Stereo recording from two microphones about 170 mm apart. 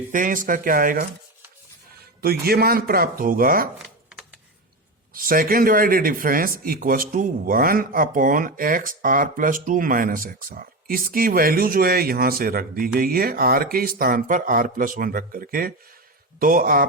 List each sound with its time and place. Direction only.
0.1 s speech: 50° right (ahead or behind)
2.2 s speech: 65° right (ahead or behind)
5.1 s speech: 55° right (ahead or behind)